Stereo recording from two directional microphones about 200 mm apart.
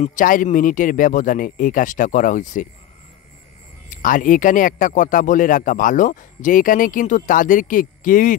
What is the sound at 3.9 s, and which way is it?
Speech, 40° left (ahead or behind).